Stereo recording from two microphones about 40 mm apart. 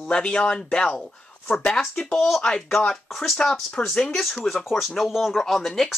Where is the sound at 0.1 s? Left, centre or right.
Left.